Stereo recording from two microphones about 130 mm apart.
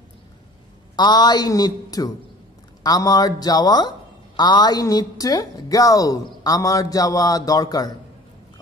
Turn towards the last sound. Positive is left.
turn(degrees=30)  # may be behind; listen again after turning